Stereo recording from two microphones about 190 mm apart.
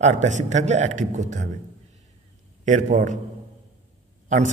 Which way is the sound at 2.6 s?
40° right (ahead or behind).